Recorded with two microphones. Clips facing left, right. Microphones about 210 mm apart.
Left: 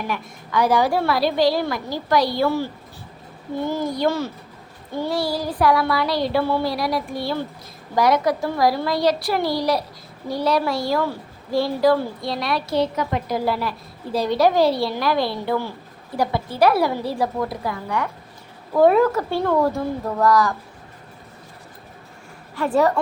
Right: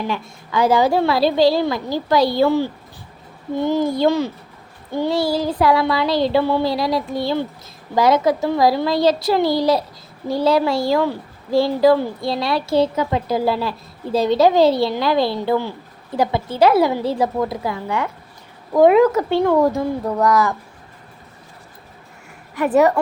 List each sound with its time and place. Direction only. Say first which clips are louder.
0.1 s a woman's voice: right 2 dB; 25° right (ahead or behind)
3.7 s a woman's voice: right 5 dB; 25° right (ahead or behind)
22.5 s a woman's voice: right 4 dB; 20° right (ahead or behind)